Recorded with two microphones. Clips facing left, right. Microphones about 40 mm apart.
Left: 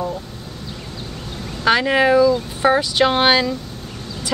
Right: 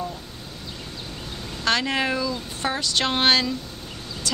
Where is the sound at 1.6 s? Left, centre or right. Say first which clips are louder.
Left 7 dB; centre.